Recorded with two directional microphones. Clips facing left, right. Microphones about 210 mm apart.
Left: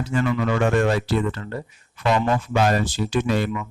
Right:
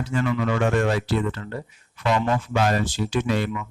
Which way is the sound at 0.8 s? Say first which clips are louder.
Left 2 dB; 40° left (ahead or behind).